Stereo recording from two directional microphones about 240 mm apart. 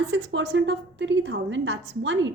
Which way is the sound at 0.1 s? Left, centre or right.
Right.